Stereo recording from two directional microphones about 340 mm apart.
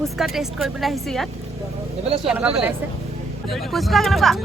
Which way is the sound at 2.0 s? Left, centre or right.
Centre.